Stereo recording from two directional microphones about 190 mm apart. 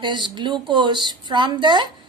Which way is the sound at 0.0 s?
25° right (ahead or behind).